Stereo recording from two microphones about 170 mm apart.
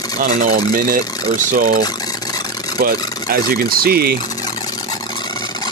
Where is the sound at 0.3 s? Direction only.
40° right (ahead or behind).